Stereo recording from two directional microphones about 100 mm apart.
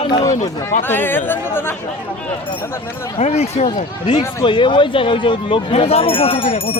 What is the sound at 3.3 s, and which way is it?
Speech, 90° left.